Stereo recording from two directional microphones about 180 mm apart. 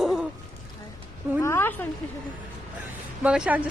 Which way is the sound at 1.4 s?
15° left (ahead or behind).